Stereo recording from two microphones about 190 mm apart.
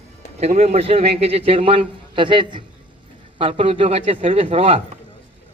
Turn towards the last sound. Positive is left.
turn(degrees=-30)  # may be behind; listen again after turning